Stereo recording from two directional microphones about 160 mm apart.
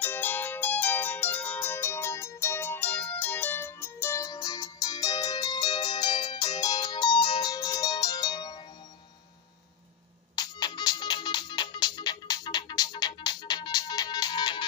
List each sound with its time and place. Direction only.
0.0 s music: 10° left (ahead or behind)
10.3 s music: 25° left (ahead or behind)